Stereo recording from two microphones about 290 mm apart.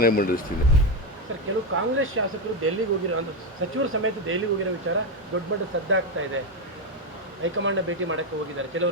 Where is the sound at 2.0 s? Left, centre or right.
Right.